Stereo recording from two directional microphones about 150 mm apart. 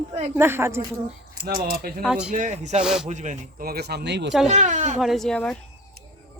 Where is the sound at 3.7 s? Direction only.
90° right.